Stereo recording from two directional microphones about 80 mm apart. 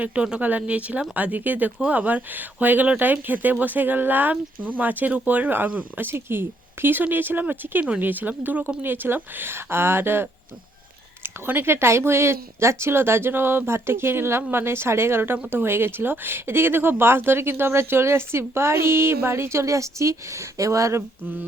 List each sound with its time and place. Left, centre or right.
0.0 s speech: centre; by 21.0 s right